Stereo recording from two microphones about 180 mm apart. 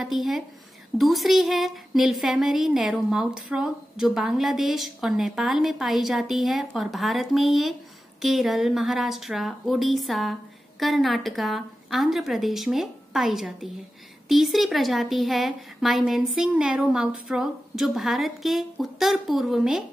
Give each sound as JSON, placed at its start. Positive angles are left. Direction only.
{"t": 0.0, "sound": "a woman's voice", "side_deg": 0}